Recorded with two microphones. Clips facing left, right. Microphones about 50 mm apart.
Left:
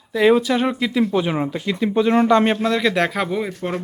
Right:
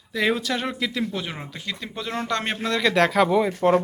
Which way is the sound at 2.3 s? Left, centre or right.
Centre.